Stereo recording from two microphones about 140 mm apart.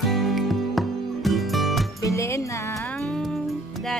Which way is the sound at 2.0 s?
20° left (ahead or behind).